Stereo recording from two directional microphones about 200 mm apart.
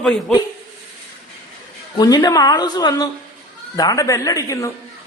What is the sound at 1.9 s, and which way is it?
A woman's voice, 20° left (ahead or behind).